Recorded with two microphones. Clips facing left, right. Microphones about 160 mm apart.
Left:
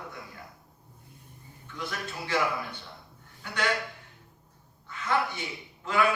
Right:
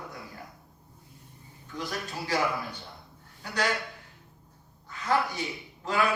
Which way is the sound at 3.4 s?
35° right (ahead or behind).